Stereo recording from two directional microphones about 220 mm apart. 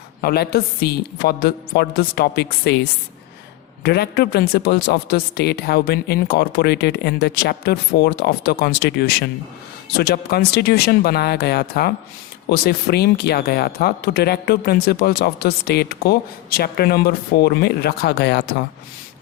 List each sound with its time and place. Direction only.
0.2 s speech: 45° left (ahead or behind)
3.8 s speech: 45° left (ahead or behind)